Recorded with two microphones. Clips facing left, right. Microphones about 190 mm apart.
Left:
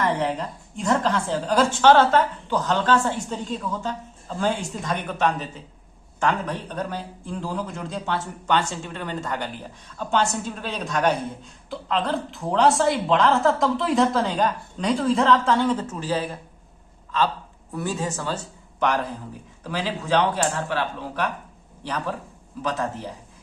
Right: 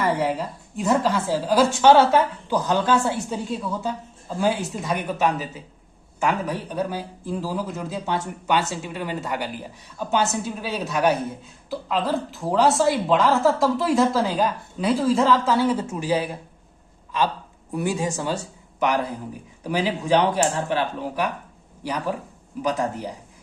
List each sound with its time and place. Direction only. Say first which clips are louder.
0.0 s a woman's voice: right 1 dB; 5° right (ahead or behind)